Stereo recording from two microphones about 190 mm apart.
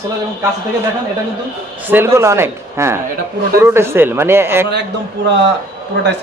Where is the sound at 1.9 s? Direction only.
15° right (ahead or behind).